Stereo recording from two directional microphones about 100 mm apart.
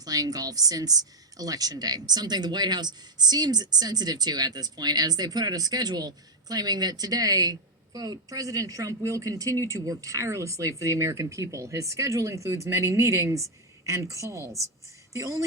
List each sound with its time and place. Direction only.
0.0 s speech: 40° right (ahead or behind)